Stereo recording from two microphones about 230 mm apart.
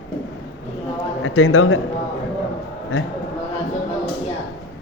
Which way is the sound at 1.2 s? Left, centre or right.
Left.